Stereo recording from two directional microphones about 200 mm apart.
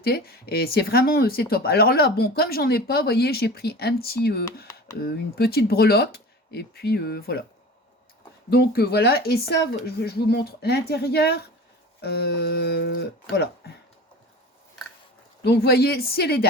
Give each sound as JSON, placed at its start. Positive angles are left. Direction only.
{"t": 0.0, "sound": "speech", "side_deg": 50}
{"t": 8.4, "sound": "speech", "side_deg": 50}
{"t": 15.4, "sound": "speech", "side_deg": 55}